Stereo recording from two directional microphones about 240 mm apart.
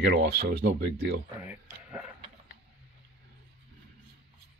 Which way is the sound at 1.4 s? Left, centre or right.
Centre.